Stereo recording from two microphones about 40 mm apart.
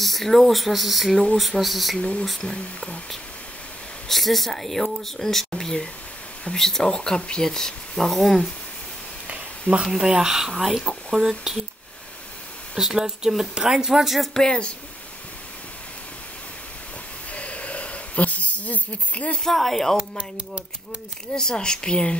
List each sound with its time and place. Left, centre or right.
0.0 s speech: centre
2.0 s speech: left
2.4 s speech: centre
4.1 s speech: centre
7.0 s speech: left; by 8.5 s centre
9.3 s a sound: right
9.8 s speech: centre
12.7 s speech: centre
14.3 s speech: centre
17.3 s a sound: left
19.4 s speech: centre
20.2 s speech: right
21.4 s speech: centre